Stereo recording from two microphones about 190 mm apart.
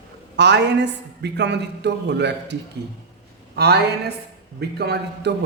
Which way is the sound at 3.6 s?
60° right (ahead or behind).